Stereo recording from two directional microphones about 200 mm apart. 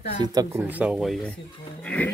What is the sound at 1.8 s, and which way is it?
Mantra, 5° left (ahead or behind).